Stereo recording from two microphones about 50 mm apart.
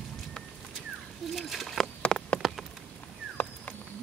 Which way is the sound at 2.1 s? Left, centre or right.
Centre.